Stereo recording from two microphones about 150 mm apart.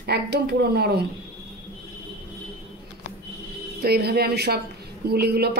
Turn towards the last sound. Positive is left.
turn(degrees=-90)